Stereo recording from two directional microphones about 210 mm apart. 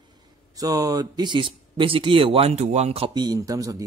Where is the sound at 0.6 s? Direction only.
15° right (ahead or behind).